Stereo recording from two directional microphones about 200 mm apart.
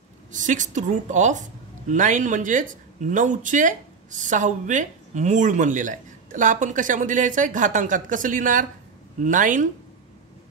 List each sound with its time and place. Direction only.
0.3 s a woman's voice: 40° right (ahead or behind)